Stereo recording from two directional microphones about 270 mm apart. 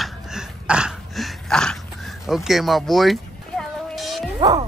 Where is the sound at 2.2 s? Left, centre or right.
Centre.